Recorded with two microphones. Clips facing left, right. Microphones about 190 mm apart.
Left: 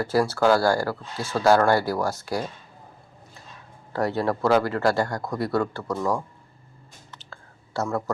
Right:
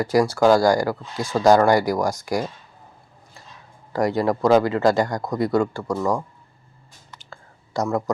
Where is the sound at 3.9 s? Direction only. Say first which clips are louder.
Right 4 dB; 15° right (ahead or behind).